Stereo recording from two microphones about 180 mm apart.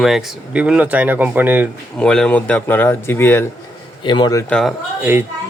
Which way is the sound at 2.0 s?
5° left (ahead or behind).